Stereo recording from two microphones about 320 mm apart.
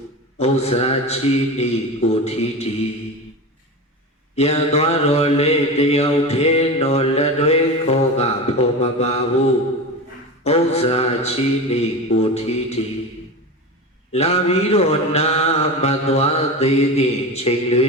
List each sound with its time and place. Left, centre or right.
0.3 s mantra: centre
4.4 s mantra: centre
14.1 s mantra: centre